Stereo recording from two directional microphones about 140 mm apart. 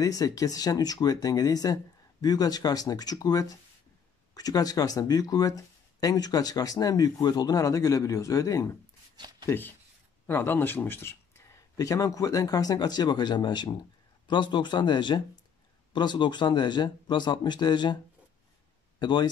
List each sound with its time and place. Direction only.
0.0 s speech: 25° left (ahead or behind)
9.1 s a sound: 30° right (ahead or behind)
9.5 s speech: 15° left (ahead or behind); by 17.9 s 30° left (ahead or behind)
18.9 s speech: 30° left (ahead or behind)